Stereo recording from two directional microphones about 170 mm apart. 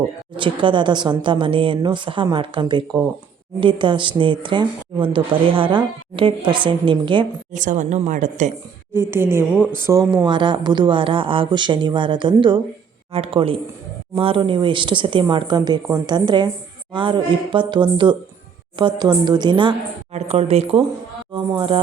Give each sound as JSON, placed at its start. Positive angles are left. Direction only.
{"t": 0.3, "sound": "a woman's voice", "side_deg": -30}
{"t": 7.5, "sound": "speech", "side_deg": -50}
{"t": 8.9, "sound": "a woman's voice", "side_deg": -15}
{"t": 20.1, "sound": "a woman's voice", "side_deg": -40}